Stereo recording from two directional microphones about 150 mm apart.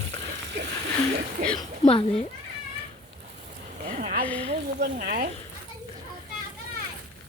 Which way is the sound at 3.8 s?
60° right (ahead or behind).